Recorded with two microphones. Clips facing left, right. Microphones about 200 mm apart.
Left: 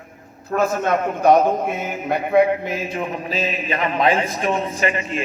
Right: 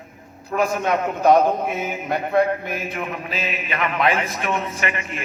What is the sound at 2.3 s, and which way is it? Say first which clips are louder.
Speech: left 4 dB; 15° left (ahead or behind).